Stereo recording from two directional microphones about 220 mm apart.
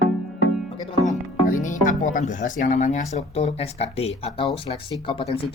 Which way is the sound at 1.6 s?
35° left (ahead or behind).